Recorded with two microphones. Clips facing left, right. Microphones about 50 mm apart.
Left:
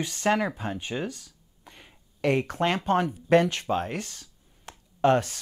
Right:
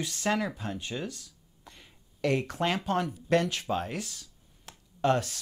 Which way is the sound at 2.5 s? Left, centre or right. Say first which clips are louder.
Left 4 dB; centre.